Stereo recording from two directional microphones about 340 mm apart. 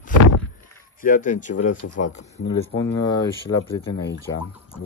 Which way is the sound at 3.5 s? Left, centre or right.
Left.